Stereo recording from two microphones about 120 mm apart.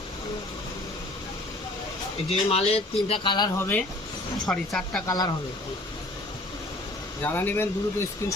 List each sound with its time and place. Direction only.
2.3 s speech: 60° left (ahead or behind)
3.6 s speech: 15° left (ahead or behind)
5.0 s speech: 35° left (ahead or behind)
7.2 s speech: 15° left (ahead or behind)